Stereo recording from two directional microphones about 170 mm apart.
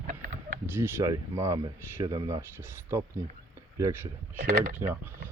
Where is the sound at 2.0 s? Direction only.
30° right (ahead or behind).